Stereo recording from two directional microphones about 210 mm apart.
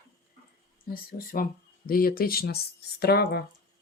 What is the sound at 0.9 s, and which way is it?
Speech, 45° left (ahead or behind).